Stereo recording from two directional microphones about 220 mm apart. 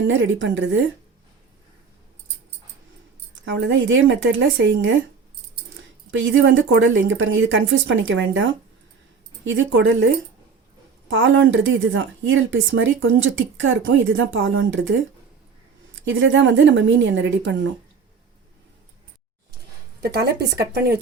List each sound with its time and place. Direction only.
0.1 s speech: 60° right (ahead or behind)
3.4 s speech: 55° right (ahead or behind)
6.1 s speech: 60° right (ahead or behind)
11.1 s speech: 60° right (ahead or behind)
16.0 s speech: 60° right (ahead or behind)
20.0 s speech: 45° right (ahead or behind)